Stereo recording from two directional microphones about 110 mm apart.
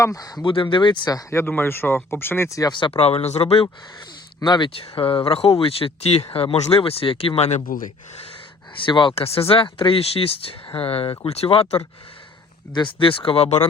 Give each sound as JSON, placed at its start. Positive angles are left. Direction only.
{"t": 0.0, "sound": "speech", "side_deg": 35}
{"t": 0.4, "sound": "speech", "side_deg": 50}
{"t": 1.3, "sound": "speech", "side_deg": 20}
{"t": 2.9, "sound": "speech", "side_deg": 70}
{"t": 4.4, "sound": "speech", "side_deg": 40}
{"t": 8.8, "sound": "speech", "side_deg": 45}
{"t": 9.1, "sound": "speech", "side_deg": 65}
{"t": 12.7, "sound": "speech", "side_deg": 50}